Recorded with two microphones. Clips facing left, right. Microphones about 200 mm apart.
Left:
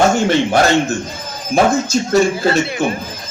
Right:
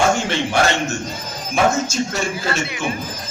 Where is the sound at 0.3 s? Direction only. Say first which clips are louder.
Left 6 dB; 40° left (ahead or behind).